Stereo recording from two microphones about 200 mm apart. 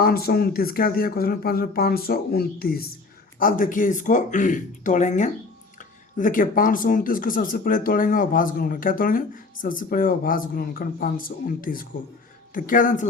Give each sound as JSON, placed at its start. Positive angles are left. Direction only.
{"t": 0.0, "sound": "speech", "side_deg": 50}